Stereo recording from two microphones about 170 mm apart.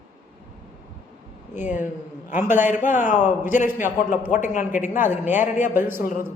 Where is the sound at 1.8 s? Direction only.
10° right (ahead or behind).